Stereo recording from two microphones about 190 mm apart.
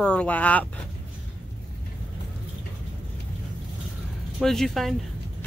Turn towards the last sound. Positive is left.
turn(degrees=0)  # may be behind; listen again after turning